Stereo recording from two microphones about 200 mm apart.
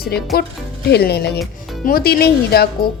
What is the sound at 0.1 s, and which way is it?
A woman's voice, 55° left (ahead or behind).